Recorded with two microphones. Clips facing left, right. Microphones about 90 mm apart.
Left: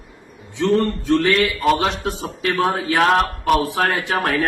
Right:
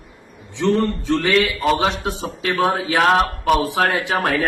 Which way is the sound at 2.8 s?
Centre (ahead or behind).